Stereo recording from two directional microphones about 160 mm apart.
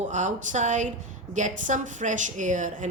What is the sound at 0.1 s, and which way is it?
A woman's voice, 50° right (ahead or behind).